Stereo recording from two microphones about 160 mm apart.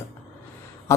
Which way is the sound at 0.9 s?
15° left (ahead or behind).